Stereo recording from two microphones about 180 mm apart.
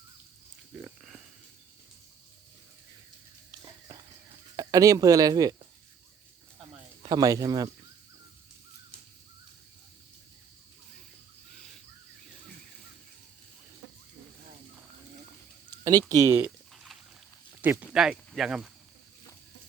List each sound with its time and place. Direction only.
0.7 s a sound: 5° right (ahead or behind)
3.5 s a sound: 25° right (ahead or behind)
4.5 s speech: 20° right (ahead or behind)
7.0 s speech: 20° right (ahead or behind)
16.0 s speech: 20° right (ahead or behind)
16.7 s pig: centre (ahead or behind)
17.6 s speech: 10° right (ahead or behind)